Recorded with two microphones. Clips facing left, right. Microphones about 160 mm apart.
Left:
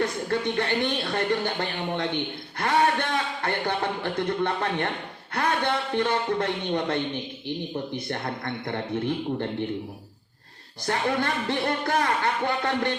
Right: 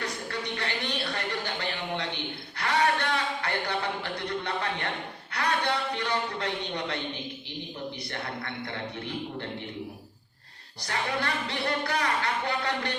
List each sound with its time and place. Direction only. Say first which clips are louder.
0.0 s speech: left 8 dB; 45° left (ahead or behind)
3.1 s a sound: left 2 dB; 50° left (ahead or behind)
5.3 s a man's voice: left 3 dB; 50° left (ahead or behind)
10.8 s speech: left 5 dB; 50° left (ahead or behind)